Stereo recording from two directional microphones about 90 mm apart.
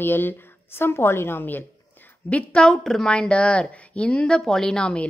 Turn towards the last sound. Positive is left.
turn(degrees=10)  # may be behind; listen again after turning